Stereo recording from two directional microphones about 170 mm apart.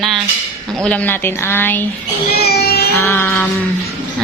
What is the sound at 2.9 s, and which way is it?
Speech, 10° left (ahead or behind).